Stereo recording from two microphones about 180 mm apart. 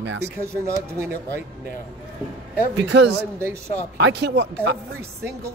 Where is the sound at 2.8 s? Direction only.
75° right (ahead or behind).